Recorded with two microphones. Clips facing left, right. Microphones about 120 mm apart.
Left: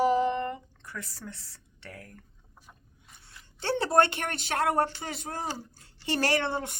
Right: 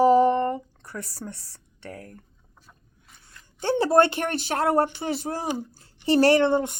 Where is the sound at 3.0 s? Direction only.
5° left (ahead or behind).